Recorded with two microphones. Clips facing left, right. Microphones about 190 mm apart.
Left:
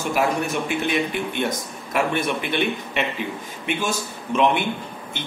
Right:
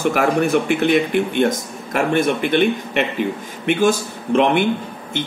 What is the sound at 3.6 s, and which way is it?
A man's voice, 55° right (ahead or behind).